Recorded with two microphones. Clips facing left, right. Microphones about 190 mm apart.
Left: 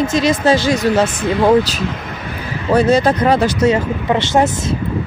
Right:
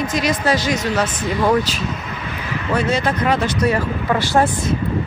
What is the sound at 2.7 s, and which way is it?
Speech, 40° left (ahead or behind).